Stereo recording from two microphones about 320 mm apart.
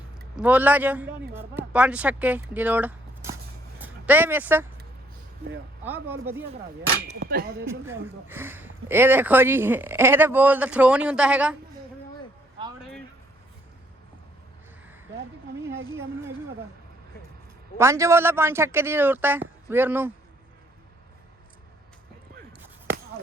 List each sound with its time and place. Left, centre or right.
0.3 s speech: centre
5.8 s speech: centre
7.1 s speech: right
7.7 s speech: centre
12.6 s a sound: centre
17.7 s speech: centre